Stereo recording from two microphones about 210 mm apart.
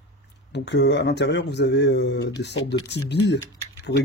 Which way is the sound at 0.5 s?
55° left (ahead or behind).